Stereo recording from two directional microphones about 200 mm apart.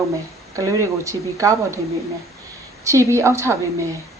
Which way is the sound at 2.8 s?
15° right (ahead or behind).